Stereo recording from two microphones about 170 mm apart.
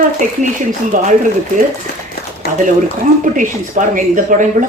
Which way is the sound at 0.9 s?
50° right (ahead or behind).